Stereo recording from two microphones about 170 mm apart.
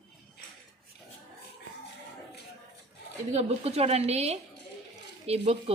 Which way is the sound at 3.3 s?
40° right (ahead or behind).